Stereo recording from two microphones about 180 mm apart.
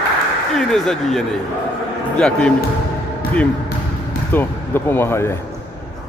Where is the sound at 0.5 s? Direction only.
Centre (ahead or behind).